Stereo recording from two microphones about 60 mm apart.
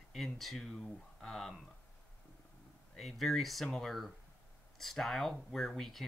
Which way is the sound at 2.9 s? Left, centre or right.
Centre.